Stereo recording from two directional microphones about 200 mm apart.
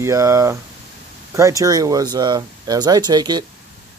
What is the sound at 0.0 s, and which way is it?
Speech, 15° right (ahead or behind).